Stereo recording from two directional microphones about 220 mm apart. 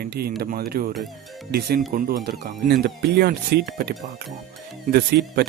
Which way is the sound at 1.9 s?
40° right (ahead or behind).